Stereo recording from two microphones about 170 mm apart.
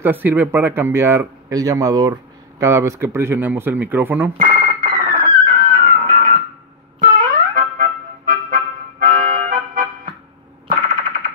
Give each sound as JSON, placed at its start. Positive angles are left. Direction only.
{"t": 0.0, "sound": "speech", "side_deg": -10}
{"t": 4.4, "sound": "music", "side_deg": -50}
{"t": 10.7, "sound": "a sound", "side_deg": -50}